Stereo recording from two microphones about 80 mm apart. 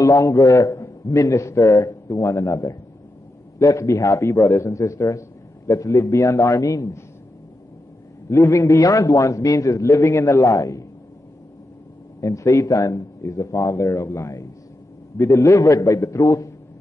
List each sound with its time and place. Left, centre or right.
0.0 s a man's voice: left
8.3 s a man's voice: left
12.2 s a man's voice: left